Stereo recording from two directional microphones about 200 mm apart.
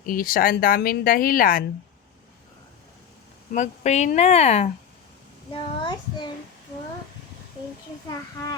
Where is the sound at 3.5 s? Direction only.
35° left (ahead or behind).